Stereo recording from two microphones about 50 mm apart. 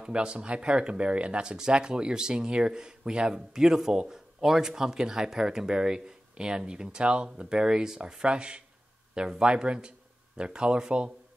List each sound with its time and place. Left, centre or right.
0.0 s speech: centre